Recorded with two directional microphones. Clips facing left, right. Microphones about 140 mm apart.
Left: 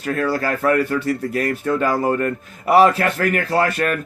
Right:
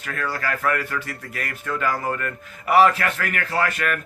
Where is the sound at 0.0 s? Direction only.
30° left (ahead or behind).